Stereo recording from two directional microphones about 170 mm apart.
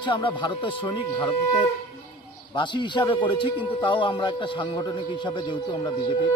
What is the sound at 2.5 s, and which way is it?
A man's voice, 25° left (ahead or behind).